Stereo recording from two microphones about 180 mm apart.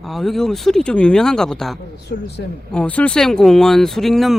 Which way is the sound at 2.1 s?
65° left (ahead or behind).